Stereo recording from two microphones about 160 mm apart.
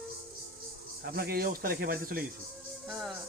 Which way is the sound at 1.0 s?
70° right (ahead or behind).